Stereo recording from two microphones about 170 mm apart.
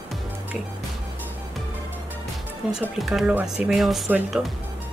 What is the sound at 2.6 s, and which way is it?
Speech, 5° right (ahead or behind).